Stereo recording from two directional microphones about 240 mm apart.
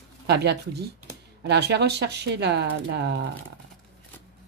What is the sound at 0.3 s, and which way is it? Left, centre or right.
Speech, right.